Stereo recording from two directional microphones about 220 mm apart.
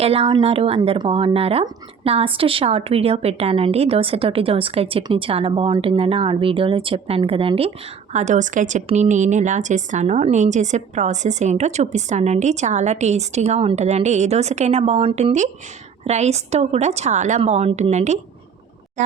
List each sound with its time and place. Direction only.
0.0 s a woman's voice: 25° right (ahead or behind)